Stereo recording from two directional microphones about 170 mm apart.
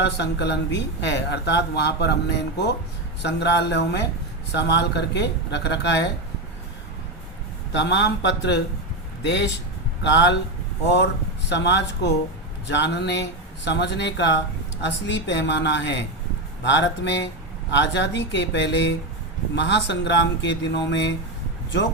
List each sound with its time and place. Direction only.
0.0 s speech: 85° left
7.7 s speech: 90° left